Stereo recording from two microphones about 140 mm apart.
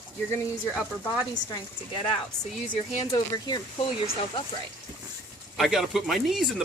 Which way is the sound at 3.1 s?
30° left (ahead or behind).